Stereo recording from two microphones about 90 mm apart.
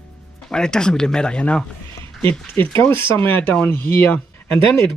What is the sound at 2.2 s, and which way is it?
Speech, 25° left (ahead or behind).